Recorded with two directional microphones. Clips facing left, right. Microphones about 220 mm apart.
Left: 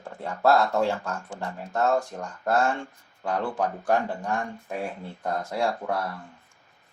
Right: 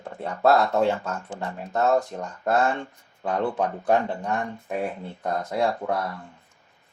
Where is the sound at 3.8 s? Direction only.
25° right (ahead or behind).